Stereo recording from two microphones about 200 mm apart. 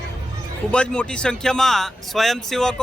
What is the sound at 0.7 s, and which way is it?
Speech, 5° left (ahead or behind).